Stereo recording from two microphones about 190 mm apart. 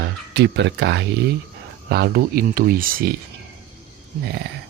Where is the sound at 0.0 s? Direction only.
65° right (ahead or behind); by 3.1 s 50° right (ahead or behind).